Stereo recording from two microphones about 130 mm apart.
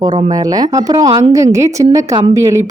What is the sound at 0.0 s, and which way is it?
Speech, 35° right (ahead or behind).